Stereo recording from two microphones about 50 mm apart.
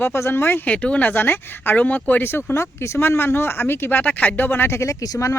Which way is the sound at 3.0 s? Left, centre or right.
Left.